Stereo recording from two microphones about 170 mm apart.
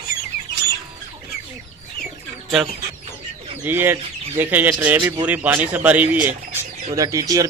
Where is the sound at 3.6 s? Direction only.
10° right (ahead or behind).